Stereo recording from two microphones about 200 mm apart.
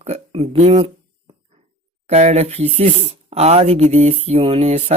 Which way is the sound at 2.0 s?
35° right (ahead or behind).